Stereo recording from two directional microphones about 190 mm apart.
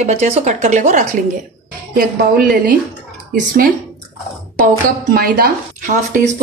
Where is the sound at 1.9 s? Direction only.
50° right (ahead or behind).